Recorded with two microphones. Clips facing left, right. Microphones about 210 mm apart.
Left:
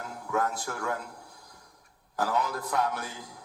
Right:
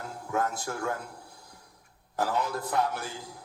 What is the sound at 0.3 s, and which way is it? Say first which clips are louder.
Speech: left 1 dB; 25° right (ahead or behind).